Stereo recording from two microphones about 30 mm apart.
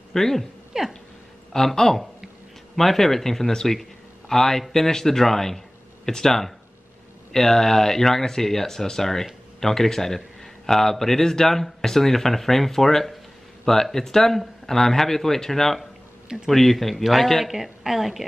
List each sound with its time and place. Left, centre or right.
0.1 s speech: centre
0.7 s speech: right
1.5 s speech: left
2.7 s speech: centre
16.9 s speech: centre
17.5 s a woman's voice: centre